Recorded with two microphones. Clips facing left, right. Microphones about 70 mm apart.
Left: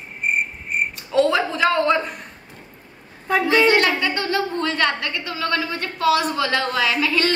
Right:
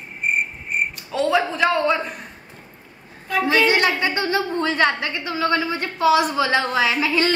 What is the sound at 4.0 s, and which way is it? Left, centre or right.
A woman's voice, right.